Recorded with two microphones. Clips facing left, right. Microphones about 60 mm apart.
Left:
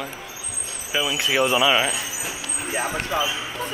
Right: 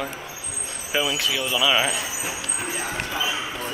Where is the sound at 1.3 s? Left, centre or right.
Left.